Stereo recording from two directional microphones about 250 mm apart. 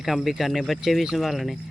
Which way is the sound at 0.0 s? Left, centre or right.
Centre.